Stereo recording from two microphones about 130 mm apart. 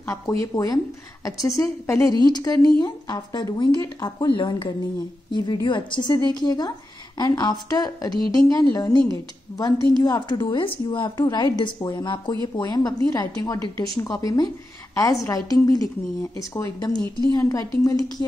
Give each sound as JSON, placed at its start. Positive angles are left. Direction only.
{"t": 0.0, "sound": "a woman's voice", "side_deg": 25}